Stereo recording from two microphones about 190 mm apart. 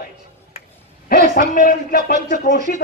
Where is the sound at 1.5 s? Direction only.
45° left (ahead or behind).